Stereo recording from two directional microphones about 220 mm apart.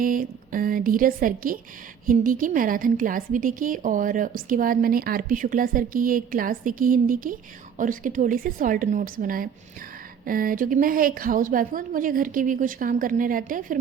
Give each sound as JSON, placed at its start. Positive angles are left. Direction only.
{"t": 0.0, "sound": "a woman's voice", "side_deg": -40}